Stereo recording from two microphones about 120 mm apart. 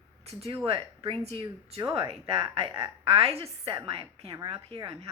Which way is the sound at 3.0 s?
55° right (ahead or behind).